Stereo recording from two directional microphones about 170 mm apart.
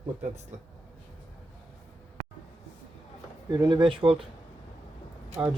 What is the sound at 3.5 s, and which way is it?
Speech, 25° right (ahead or behind).